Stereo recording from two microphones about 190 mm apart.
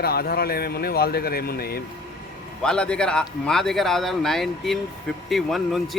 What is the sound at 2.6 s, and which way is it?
Speech, 5° left (ahead or behind).